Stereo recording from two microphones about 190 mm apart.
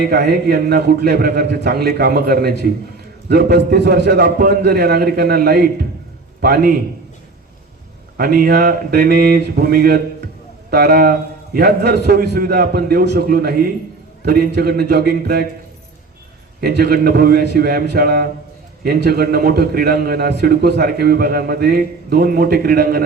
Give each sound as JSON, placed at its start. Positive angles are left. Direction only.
{"t": 0.0, "sound": "a man's voice", "side_deg": -55}
{"t": 8.2, "sound": "a man's voice", "side_deg": -50}
{"t": 16.6, "sound": "a man's voice", "side_deg": -55}